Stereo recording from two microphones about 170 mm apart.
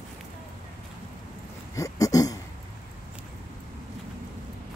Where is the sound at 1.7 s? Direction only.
20° left (ahead or behind).